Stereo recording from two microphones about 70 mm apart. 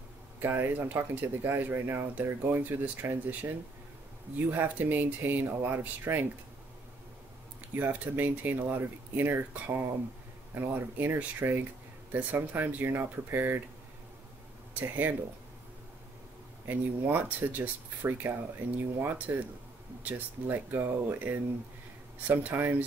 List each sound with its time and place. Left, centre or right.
0.4 s speech: right
7.7 s speech: right
14.7 s speech: right
16.6 s speech: right